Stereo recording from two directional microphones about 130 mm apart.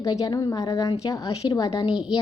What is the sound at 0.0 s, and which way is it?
A woman's voice, 25° left (ahead or behind).